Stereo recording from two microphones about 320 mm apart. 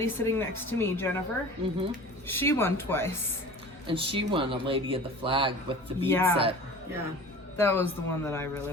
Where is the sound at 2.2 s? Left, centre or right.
Centre.